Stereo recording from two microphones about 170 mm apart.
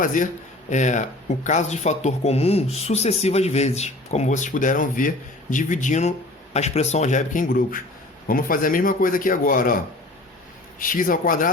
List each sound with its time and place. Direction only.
0.0 s speech: 50° left (ahead or behind)